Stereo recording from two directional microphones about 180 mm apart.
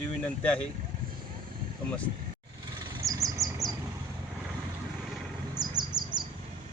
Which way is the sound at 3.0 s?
20° right (ahead or behind).